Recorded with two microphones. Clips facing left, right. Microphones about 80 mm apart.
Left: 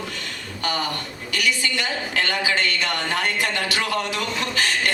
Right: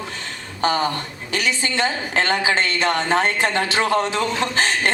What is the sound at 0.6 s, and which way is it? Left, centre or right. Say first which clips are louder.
A woman's voice: right 6 dB; right.